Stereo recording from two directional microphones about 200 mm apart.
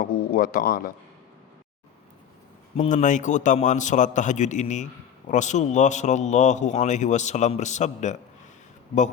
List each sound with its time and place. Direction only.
0.0 s a man's voice: 45° left (ahead or behind)
2.7 s a man's voice: 40° left (ahead or behind)